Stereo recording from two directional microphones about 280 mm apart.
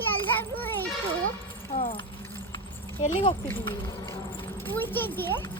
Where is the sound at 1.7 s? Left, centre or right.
Centre.